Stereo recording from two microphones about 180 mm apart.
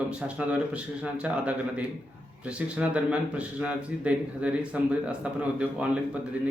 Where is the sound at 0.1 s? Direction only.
5° right (ahead or behind).